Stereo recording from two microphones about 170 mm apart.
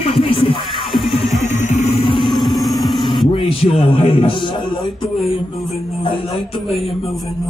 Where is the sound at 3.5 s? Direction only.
35° left (ahead or behind).